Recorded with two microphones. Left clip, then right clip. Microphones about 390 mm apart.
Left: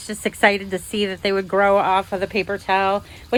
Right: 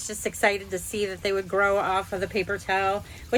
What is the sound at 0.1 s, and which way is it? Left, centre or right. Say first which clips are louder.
A woman's voice: left 7 dB; left.